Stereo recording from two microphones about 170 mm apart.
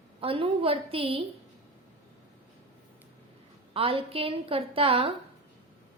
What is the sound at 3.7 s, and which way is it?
A woman's voice, 35° right (ahead or behind).